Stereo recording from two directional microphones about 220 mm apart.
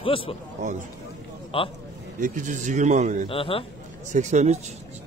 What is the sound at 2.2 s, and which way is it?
A man's voice, 35° right (ahead or behind).